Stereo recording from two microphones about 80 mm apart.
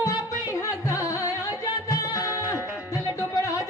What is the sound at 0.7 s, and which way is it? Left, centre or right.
Carnatic music, left.